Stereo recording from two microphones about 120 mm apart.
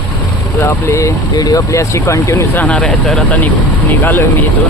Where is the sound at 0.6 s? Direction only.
25° left (ahead or behind); by 3.3 s 5° left (ahead or behind).